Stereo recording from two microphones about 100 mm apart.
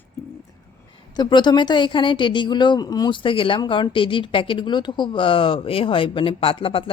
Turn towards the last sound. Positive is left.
turn(degrees=65)  # may be behind; listen again after turning